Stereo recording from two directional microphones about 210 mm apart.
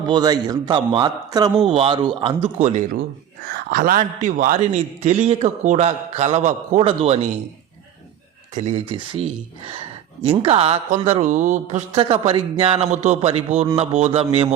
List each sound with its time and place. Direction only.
0.0 s a man's voice: 20° right (ahead or behind)
8.5 s speech: 30° right (ahead or behind)